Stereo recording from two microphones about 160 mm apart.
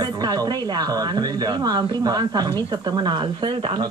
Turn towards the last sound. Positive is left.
turn(degrees=-30)  # may be behind; listen again after turning